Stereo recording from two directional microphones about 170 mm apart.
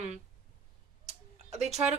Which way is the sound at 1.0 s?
40° right (ahead or behind).